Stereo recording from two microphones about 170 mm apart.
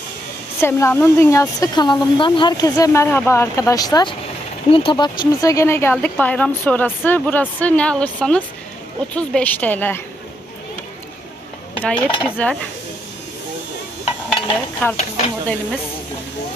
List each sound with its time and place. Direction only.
0.6 s speech: 15° left (ahead or behind)
11.8 s speech: 10° left (ahead or behind)
14.3 s stir: 10° left (ahead or behind)